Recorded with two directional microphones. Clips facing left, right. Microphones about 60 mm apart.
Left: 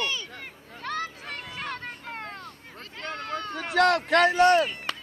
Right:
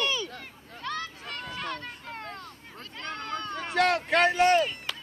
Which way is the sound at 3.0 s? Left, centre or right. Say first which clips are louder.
Left 2 dB; centre.